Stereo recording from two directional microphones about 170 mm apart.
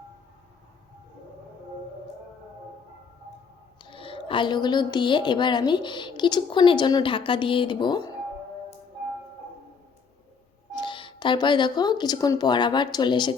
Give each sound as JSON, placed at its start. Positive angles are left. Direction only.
{"t": 3.8, "sound": "a woman's voice", "side_deg": 30}
{"t": 10.7, "sound": "speech", "side_deg": 25}